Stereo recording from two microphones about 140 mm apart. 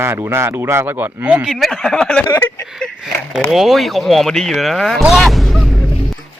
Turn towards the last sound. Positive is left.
turn(degrees=0)  # may be behind; listen again after turning